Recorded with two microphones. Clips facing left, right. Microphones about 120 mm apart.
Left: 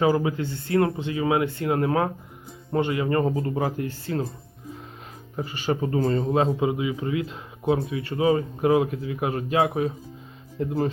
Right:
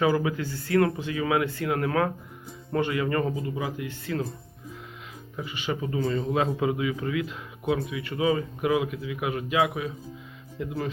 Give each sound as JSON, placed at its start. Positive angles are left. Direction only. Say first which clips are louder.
{"t": 0.0, "sound": "speech", "louder": "left 2 dB", "side_deg": 30}
{"t": 3.3, "sound": "speech", "louder": "left 5 dB", "side_deg": 50}
{"t": 4.0, "sound": "a man's voice", "louder": "left 1 dB", "side_deg": 30}
{"t": 5.4, "sound": "a man's voice", "louder": "left 5 dB", "side_deg": 40}